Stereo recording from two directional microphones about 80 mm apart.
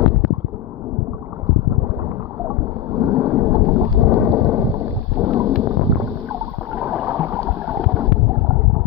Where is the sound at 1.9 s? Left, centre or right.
Right.